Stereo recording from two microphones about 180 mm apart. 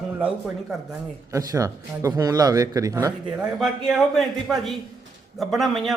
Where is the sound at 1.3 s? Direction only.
20° right (ahead or behind).